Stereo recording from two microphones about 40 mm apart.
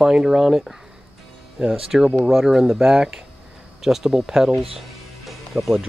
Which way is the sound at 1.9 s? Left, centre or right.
Centre.